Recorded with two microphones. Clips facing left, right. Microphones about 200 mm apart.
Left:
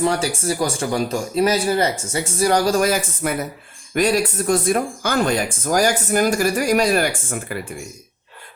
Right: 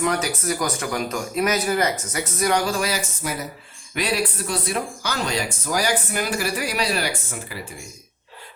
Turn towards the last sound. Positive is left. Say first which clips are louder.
# left 6 dB
turn(degrees=55)  # may be behind; listen again after turning